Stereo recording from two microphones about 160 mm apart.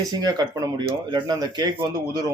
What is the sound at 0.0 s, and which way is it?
Speech, 25° right (ahead or behind).